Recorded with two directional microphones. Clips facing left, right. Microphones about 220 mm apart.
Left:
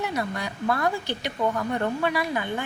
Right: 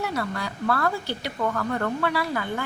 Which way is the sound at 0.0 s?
20° left (ahead or behind).